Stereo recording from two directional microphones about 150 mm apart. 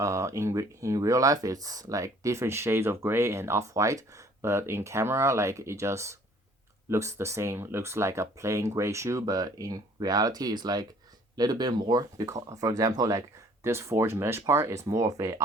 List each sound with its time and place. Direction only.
0.0 s speech: 20° right (ahead or behind)